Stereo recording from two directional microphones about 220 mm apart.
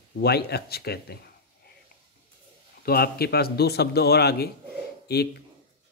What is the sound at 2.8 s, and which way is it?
Speech, 45° left (ahead or behind).